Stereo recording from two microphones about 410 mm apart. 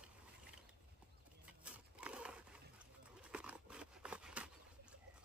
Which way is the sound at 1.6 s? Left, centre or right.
Centre.